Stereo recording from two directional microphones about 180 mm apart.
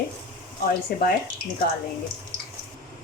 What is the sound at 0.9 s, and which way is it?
Speech, 55° left (ahead or behind).